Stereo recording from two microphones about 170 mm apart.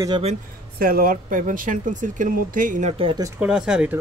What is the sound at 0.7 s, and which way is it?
Speech, 60° right (ahead or behind).